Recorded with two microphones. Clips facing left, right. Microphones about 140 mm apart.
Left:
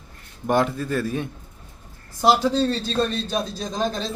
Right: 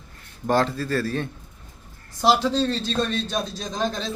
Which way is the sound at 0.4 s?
15° left (ahead or behind).